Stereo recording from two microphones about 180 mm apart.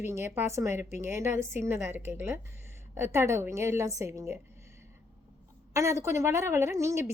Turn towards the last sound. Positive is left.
turn(degrees=-15)  # may be behind; listen again after turning